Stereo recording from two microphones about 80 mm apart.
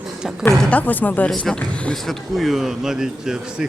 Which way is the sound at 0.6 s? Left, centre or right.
Centre.